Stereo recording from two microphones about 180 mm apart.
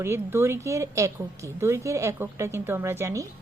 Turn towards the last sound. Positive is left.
turn(degrees=-15)  # may be behind; listen again after turning